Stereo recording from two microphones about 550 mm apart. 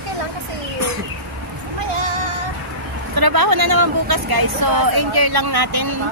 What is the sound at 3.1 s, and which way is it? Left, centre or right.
Speech, right.